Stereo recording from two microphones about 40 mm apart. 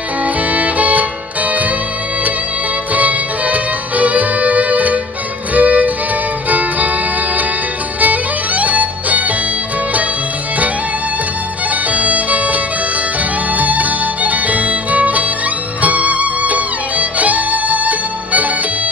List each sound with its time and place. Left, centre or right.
0.2 s music: right
2.9 s music: right
8.0 s music: right
11.9 s bagpipes: right
13.6 s music: right